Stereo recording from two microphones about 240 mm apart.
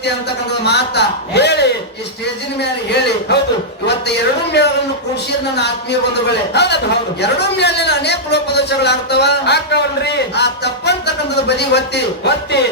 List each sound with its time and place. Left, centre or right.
0.6 s a man's voice: left